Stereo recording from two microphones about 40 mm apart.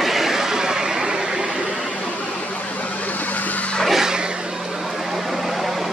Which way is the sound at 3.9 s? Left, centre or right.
Centre.